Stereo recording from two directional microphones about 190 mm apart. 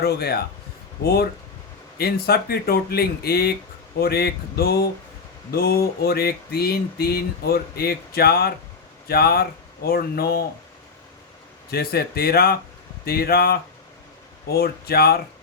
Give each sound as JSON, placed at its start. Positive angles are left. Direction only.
{"t": 0.0, "sound": "speech", "side_deg": 55}
{"t": 11.7, "sound": "speech", "side_deg": 55}